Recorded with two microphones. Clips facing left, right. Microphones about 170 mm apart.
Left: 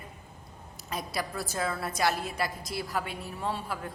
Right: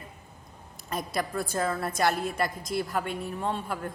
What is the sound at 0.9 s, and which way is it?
A man's voice, centre (ahead or behind).